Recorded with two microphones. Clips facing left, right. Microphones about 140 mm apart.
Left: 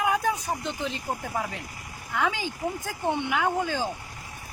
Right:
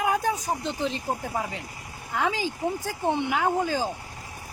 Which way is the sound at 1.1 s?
30° right (ahead or behind).